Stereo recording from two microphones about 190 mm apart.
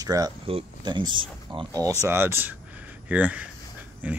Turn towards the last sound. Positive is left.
turn(degrees=-10)  # may be behind; listen again after turning